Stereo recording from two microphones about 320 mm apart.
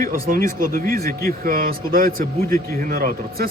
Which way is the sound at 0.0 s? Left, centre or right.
Right.